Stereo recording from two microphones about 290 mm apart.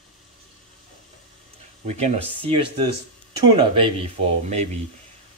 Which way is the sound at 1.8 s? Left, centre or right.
Right.